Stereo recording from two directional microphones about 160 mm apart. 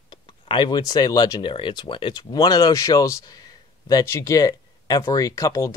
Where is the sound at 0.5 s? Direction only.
30° left (ahead or behind).